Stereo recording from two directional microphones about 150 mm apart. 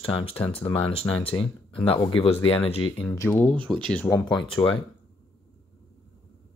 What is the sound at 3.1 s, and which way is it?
Speech, 10° left (ahead or behind).